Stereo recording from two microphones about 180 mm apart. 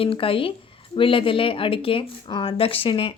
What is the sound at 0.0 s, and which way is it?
Speech, 30° left (ahead or behind).